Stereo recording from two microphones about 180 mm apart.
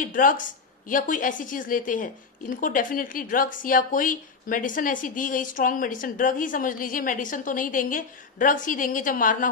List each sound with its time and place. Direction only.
0.0 s speech: 50° left (ahead or behind)